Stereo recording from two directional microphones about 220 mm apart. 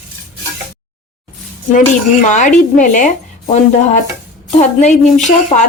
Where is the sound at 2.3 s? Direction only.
35° left (ahead or behind).